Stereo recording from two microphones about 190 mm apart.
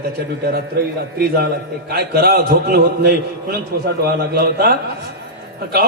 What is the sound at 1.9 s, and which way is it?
A man's voice, 55° right (ahead or behind).